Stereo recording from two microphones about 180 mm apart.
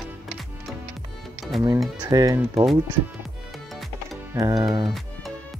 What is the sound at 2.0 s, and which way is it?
Speech, 20° right (ahead or behind).